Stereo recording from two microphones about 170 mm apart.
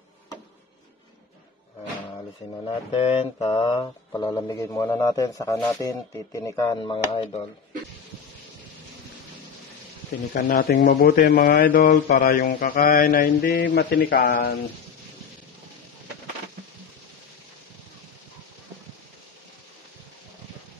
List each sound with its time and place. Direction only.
2.6 s mantra: 35° left (ahead or behind)
10.3 s speech: 55° left (ahead or behind)
10.7 s speech: 80° left
14.2 s speech: 50° left (ahead or behind)